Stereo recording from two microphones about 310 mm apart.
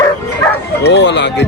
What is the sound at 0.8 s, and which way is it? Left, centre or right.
Speech, left.